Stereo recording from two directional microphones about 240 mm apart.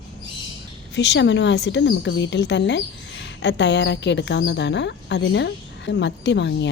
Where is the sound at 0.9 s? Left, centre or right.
Left.